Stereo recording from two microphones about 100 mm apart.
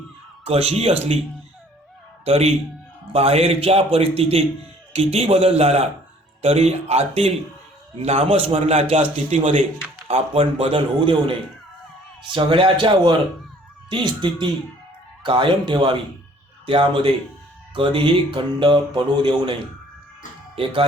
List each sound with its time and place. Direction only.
0.4 s a man's voice: 90° right
2.2 s a man's voice: 90° right
4.9 s a man's voice: 90° right
10.1 s a man's voice: 80° right; by 19.5 s 55° right (ahead or behind)